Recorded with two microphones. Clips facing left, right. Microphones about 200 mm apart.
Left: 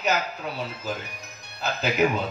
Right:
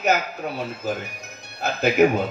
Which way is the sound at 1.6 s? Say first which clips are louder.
Right 6 dB; 50° right (ahead or behind).